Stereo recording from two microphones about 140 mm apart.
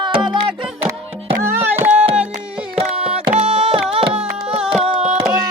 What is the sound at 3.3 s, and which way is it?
Music, 45° right (ahead or behind).